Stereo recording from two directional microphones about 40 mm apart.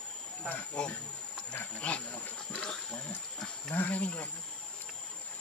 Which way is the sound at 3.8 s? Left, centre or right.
Left.